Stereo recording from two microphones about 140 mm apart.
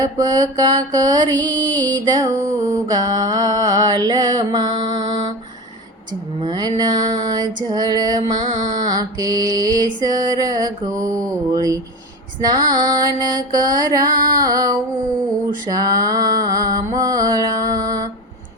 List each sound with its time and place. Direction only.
0.0 s music: 25° right (ahead or behind)
6.4 s music: 30° right (ahead or behind)
15.4 s a sound: 30° right (ahead or behind)